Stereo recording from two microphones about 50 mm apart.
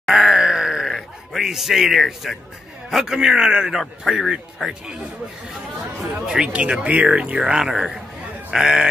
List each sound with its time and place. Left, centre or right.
0.0 s groan: centre
0.9 s a man's voice: centre
5.9 s a man's voice: centre
6.5 s speech: right
7.6 s a man's voice: centre